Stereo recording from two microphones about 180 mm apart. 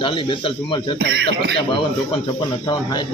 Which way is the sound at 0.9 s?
65° right (ahead or behind).